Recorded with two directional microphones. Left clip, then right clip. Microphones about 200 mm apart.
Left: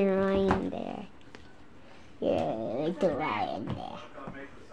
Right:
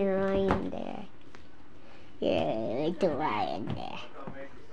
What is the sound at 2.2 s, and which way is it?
Speech, 5° right (ahead or behind).